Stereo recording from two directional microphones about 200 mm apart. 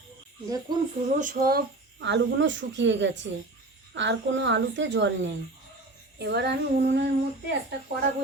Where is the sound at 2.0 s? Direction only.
65° right (ahead or behind).